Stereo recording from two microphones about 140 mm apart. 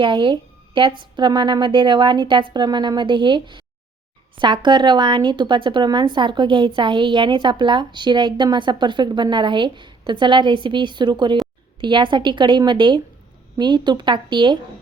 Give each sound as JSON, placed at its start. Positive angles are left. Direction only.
{"t": 0.0, "sound": "speech", "side_deg": -35}